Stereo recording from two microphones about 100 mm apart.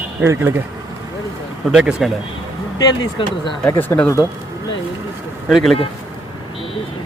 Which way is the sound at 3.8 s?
20° left (ahead or behind).